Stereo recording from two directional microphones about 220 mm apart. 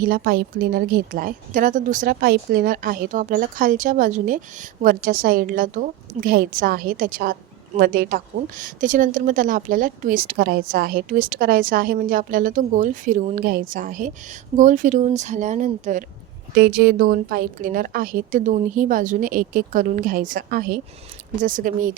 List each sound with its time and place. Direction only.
0.0 s a woman's voice: 40° right (ahead or behind)